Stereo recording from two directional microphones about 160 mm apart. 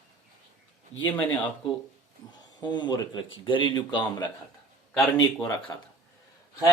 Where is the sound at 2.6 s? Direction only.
25° left (ahead or behind).